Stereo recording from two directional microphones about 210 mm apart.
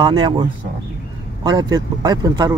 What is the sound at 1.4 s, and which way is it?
Speech, 20° right (ahead or behind).